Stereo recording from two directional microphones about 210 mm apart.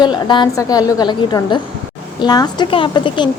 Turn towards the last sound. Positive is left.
turn(degrees=20)  # may be behind; listen again after turning